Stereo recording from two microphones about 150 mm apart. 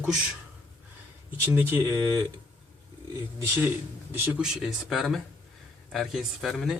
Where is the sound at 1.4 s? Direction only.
15° right (ahead or behind).